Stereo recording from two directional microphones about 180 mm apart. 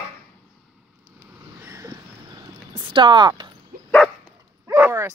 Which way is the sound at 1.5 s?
15° right (ahead or behind).